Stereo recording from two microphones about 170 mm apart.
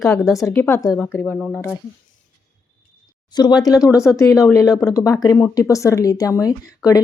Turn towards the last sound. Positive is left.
turn(degrees=20)  # may be behind; listen again after turning